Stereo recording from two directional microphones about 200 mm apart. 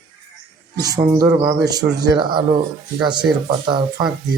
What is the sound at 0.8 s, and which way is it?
Speech, 15° right (ahead or behind).